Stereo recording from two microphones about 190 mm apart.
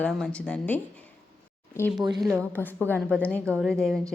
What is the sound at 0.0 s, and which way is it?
Speech, 5° left (ahead or behind).